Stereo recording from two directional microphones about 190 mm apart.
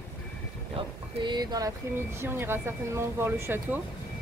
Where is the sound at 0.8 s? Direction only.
25° right (ahead or behind).